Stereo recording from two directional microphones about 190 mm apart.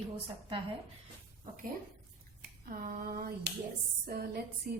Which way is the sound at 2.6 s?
45° right (ahead or behind).